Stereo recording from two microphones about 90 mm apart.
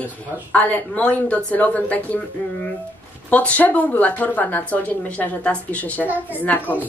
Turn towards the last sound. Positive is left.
turn(degrees=20)  # may be behind; listen again after turning